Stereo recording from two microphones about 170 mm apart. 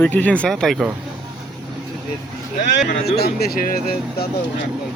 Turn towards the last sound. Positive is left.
turn(degrees=60)  # may be behind; listen again after turning